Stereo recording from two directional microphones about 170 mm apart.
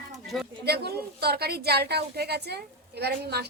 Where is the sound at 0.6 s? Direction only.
70° right (ahead or behind).